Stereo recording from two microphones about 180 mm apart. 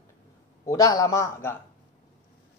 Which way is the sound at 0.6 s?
20° left (ahead or behind).